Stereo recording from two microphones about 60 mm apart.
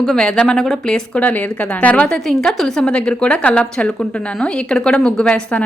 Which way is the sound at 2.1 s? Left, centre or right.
Centre.